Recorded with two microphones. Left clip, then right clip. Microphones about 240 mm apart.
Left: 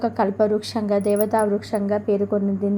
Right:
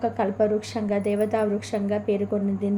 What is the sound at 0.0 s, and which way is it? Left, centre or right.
A woman's voice, left.